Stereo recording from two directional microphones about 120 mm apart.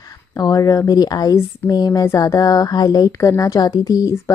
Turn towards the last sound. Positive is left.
turn(degrees=30)  # may be behind; listen again after turning